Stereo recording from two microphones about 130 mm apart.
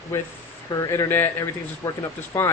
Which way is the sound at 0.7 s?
25° left (ahead or behind).